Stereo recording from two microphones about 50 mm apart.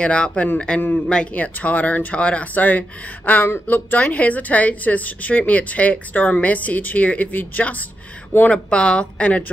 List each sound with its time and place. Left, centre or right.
0.0 s a woman's voice: left
0.7 s speech: left
1.0 s a woman's voice: centre
1.3 s speech: left
8.5 s a woman's voice: left